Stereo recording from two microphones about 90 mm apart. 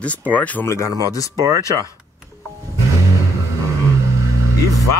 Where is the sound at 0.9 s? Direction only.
45° right (ahead or behind).